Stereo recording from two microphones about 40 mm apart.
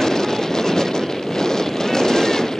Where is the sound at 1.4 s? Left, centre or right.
Centre.